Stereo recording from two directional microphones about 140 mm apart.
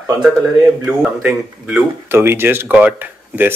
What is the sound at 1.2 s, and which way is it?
Speech, 10° right (ahead or behind).